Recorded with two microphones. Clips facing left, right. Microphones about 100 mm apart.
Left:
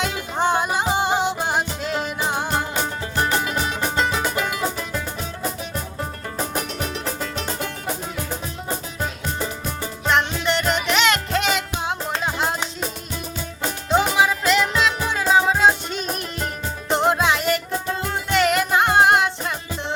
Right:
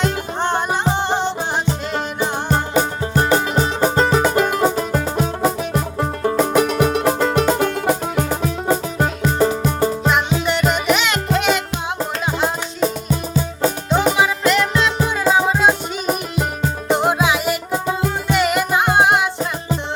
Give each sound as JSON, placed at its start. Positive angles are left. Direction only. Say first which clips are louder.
{"t": 0.0, "sound": "music", "louder": "right 2 dB", "side_deg": 5}
{"t": 3.2, "sound": "music", "louder": "right 5 dB", "side_deg": -30}
{"t": 9.5, "sound": "music", "louder": "right 11 dB", "side_deg": -40}
{"t": 10.4, "sound": "music", "louder": "right 4 dB", "side_deg": -5}
{"t": 13.9, "sound": "music", "louder": "even", "side_deg": 0}
{"t": 16.9, "sound": "music", "louder": "right 2 dB", "side_deg": -5}